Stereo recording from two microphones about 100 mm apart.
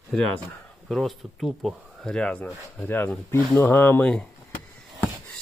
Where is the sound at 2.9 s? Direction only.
20° left (ahead or behind).